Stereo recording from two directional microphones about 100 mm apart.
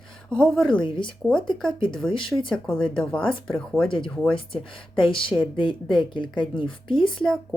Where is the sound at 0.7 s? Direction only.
55° left (ahead or behind).